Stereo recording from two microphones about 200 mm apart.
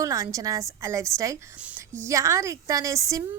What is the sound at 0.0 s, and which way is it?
A woman's voice, 15° right (ahead or behind).